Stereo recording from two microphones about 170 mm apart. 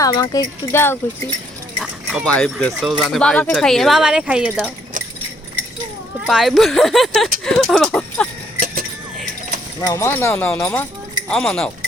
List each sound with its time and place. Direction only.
0.0 s speech: 20° left (ahead or behind); by 4.7 s 5° right (ahead or behind)
6.2 s speech: centre (ahead or behind)
8.5 s keys jangling: 55° right (ahead or behind)
9.8 s speech: 15° left (ahead or behind)